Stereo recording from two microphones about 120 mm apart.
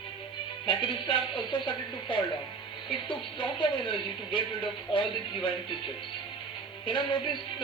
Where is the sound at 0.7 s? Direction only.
40° left (ahead or behind).